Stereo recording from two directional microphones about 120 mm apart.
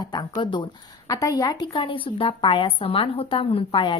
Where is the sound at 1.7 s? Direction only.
45° left (ahead or behind).